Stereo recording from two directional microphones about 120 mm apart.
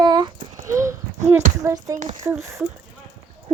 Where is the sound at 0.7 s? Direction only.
25° right (ahead or behind).